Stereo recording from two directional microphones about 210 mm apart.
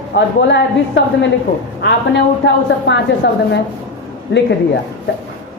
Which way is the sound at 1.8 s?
55° left (ahead or behind).